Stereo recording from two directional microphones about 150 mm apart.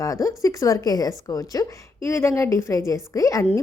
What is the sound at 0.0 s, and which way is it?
A woman's voice, 20° left (ahead or behind).